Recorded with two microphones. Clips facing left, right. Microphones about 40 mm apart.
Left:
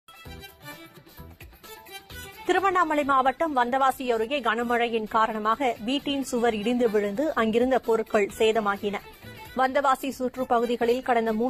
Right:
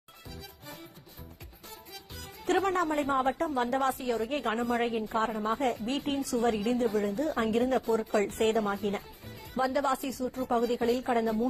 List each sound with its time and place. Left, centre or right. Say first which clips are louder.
2.1 s speech: left 4 dB; left